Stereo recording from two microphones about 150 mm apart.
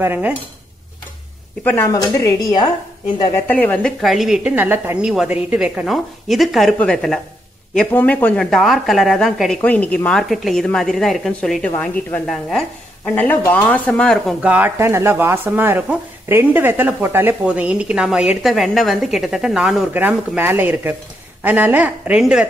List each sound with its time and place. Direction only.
0.0 s speech: 15° right (ahead or behind)
1.6 s a woman's voice: 10° left (ahead or behind)
1.9 s speech: 20° left (ahead or behind)
3.4 s a woman's voice: 10° left (ahead or behind)
4.0 s a woman's voice: centre (ahead or behind)
14.4 s a woman's voice: 10° right (ahead or behind)